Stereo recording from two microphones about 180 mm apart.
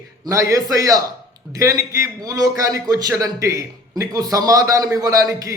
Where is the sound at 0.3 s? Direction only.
20° right (ahead or behind).